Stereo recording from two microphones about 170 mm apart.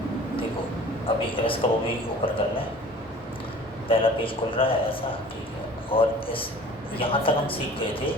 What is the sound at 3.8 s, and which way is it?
A man's voice, 30° left (ahead or behind).